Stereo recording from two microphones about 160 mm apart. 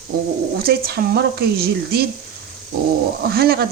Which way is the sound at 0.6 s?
70° right (ahead or behind).